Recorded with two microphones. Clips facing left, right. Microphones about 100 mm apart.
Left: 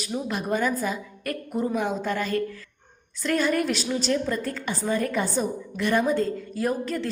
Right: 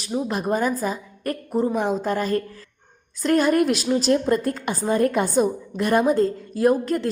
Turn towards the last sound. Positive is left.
turn(degrees=-45)  # may be behind; listen again after turning